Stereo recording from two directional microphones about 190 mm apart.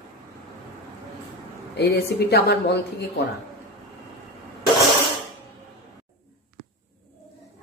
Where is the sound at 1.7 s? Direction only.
60° left (ahead or behind).